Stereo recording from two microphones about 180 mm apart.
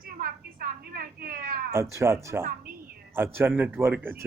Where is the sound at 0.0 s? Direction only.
55° right (ahead or behind).